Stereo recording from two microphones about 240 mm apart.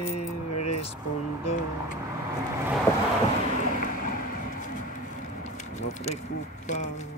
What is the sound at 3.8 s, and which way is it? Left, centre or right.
Vehicle, left.